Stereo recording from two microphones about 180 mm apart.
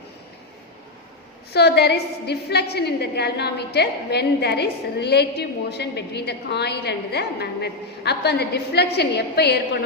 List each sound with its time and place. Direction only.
1.5 s a woman's voice: 65° left (ahead or behind)